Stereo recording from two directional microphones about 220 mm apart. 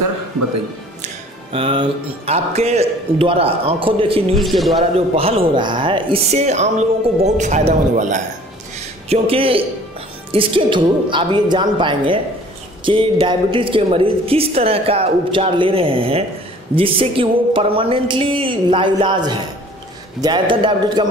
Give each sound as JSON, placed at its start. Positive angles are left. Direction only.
{"t": 1.0, "sound": "a woman's voice", "side_deg": -25}
{"t": 4.4, "sound": "a man's voice", "side_deg": 0}
{"t": 4.9, "sound": "a woman's voice", "side_deg": -25}
{"t": 8.7, "sound": "a sound", "side_deg": -25}
{"t": 10.3, "sound": "a woman's voice", "side_deg": -25}